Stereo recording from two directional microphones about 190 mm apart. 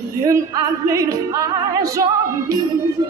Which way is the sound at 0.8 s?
15° right (ahead or behind).